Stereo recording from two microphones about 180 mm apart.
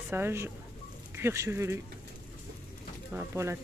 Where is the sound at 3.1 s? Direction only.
15° right (ahead or behind).